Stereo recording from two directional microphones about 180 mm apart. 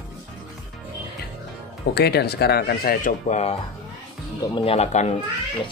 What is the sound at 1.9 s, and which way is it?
Speech, 65° left (ahead or behind).